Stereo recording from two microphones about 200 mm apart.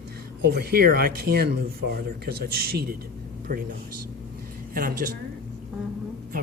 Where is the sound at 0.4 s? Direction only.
50° right (ahead or behind).